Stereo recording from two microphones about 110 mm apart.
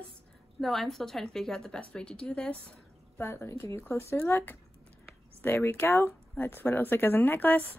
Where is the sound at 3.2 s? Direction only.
20° left (ahead or behind).